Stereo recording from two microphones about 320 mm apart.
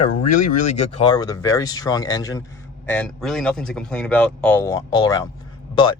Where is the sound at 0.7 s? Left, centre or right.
Centre.